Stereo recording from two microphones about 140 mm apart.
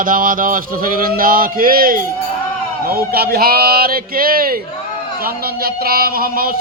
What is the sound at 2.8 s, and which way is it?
Speech, 90° right.